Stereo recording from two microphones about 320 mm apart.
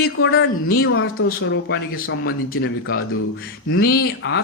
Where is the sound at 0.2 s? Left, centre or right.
Left.